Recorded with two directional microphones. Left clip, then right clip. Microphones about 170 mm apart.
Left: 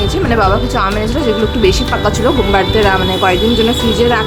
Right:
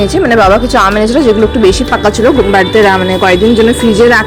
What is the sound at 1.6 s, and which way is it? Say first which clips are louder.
Speech: right 4 dB; 35° right (ahead or behind).